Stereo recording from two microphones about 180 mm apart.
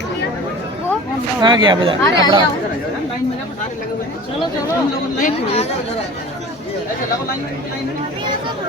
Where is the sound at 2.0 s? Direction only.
20° left (ahead or behind).